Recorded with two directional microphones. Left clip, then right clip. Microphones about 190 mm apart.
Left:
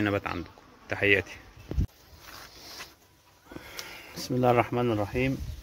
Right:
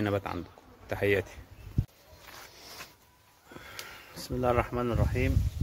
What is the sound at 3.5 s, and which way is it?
Speech, 30° left (ahead or behind).